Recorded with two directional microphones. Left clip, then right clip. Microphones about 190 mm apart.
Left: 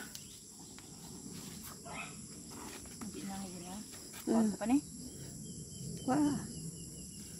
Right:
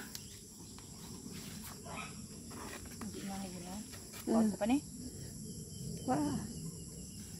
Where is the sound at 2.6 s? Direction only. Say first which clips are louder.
Right 2 dB; 5° right (ahead or behind).